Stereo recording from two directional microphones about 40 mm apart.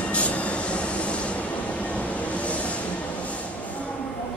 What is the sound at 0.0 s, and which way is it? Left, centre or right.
Vehicle, left.